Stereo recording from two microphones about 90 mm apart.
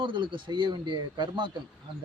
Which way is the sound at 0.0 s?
65° right (ahead or behind).